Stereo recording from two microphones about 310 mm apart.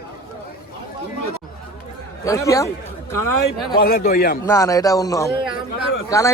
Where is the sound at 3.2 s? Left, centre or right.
Left.